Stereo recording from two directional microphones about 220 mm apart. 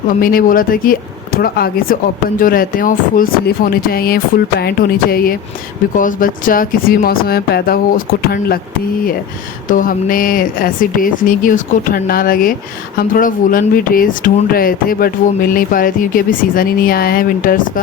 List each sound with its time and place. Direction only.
0.1 s speech: 40° left (ahead or behind)
9.6 s speech: 40° left (ahead or behind)